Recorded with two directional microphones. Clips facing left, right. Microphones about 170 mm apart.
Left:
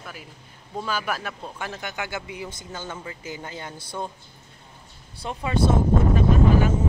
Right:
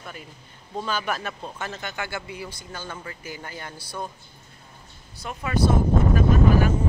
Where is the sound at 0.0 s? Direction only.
5° left (ahead or behind); by 4.1 s 20° left (ahead or behind).